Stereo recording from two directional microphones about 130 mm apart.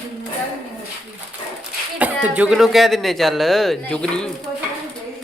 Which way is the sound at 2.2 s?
10° right (ahead or behind).